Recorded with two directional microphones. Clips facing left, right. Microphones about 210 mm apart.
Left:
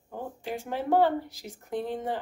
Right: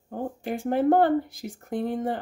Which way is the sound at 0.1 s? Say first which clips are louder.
Right 5 dB; 50° right (ahead or behind).